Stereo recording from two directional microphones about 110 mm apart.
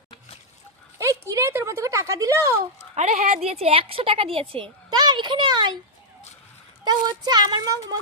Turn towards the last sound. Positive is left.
turn(degrees=-40)  # may be behind; listen again after turning